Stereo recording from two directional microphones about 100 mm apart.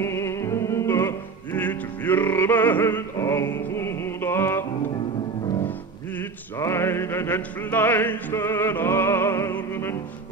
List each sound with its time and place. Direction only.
0.0 s music: 25° left (ahead or behind)
6.6 s music: 25° left (ahead or behind)